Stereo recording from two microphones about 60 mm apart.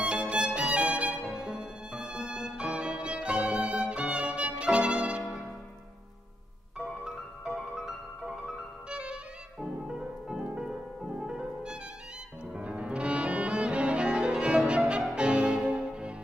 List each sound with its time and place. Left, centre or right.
0.0 s music: centre
6.8 s music: centre